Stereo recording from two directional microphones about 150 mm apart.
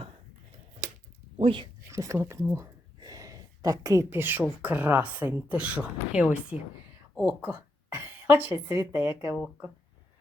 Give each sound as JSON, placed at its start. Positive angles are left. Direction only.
{"t": 1.4, "sound": "speech", "side_deg": -35}
{"t": 1.9, "sound": "a woman's voice", "side_deg": -20}